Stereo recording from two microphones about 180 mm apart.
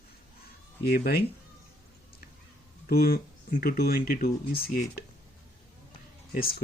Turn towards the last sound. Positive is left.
turn(degrees=55)  # may be behind; listen again after turning